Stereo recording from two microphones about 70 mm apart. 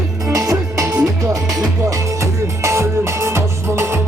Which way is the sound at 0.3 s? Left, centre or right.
Right.